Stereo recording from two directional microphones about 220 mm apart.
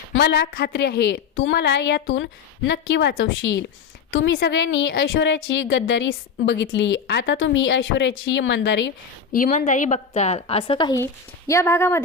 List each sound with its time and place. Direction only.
0.1 s a woman's voice: 50° left (ahead or behind)
9.3 s a woman's voice: 35° left (ahead or behind); by 12.0 s 10° left (ahead or behind)